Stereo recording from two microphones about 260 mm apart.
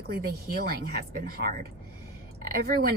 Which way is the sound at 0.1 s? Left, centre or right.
Right.